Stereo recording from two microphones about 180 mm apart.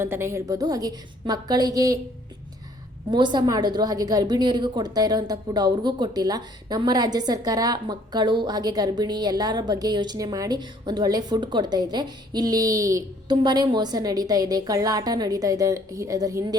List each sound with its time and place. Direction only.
0.0 s a woman's voice: 15° right (ahead or behind)
3.1 s a woman's voice: 25° right (ahead or behind)